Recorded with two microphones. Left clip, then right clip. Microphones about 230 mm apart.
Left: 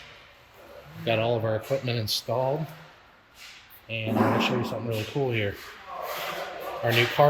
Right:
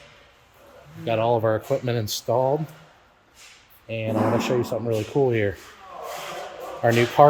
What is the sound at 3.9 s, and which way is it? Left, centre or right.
Speech, right.